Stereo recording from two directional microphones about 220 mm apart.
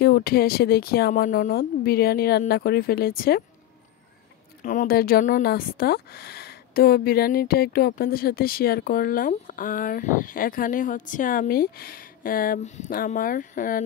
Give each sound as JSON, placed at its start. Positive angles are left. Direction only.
{"t": 0.0, "sound": "a woman's voice", "side_deg": 45}
{"t": 4.6, "sound": "speech", "side_deg": 40}